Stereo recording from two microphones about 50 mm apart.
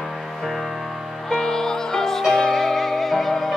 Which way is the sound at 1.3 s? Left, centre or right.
Centre.